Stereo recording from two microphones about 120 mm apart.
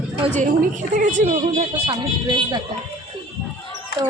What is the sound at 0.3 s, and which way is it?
A woman's voice, 90° right.